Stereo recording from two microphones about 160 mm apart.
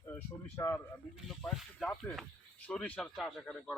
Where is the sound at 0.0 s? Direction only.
15° left (ahead or behind).